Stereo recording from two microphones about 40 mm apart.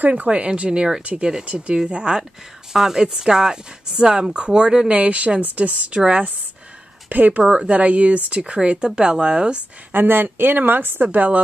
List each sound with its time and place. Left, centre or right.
0.0 s speech: right
0.7 s speech: centre
4.9 s speech: right
7.1 s speech: right
7.4 s speech: right
8.8 s speech: centre
9.9 s speech: right